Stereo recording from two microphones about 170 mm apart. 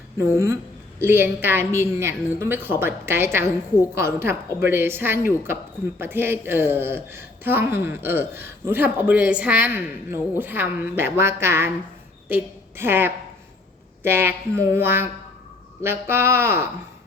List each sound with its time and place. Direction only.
0.2 s a woman's voice: 15° right (ahead or behind)